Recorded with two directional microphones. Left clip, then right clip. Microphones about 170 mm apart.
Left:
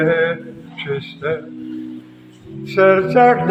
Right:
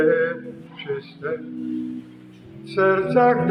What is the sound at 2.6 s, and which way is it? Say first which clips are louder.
Speech: left 6 dB; 20° left (ahead or behind).